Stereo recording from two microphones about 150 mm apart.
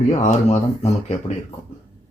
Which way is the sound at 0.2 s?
50° left (ahead or behind).